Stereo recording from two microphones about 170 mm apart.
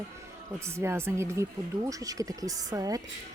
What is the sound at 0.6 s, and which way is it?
Speech, 15° right (ahead or behind).